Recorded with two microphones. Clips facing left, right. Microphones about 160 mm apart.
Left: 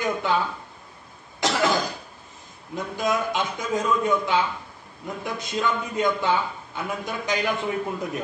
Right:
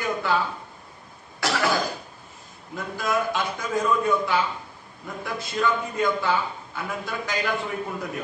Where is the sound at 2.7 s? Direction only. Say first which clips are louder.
Left 1 dB; 20° left (ahead or behind).